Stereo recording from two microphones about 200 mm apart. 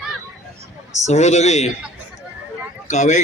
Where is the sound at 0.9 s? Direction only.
35° left (ahead or behind).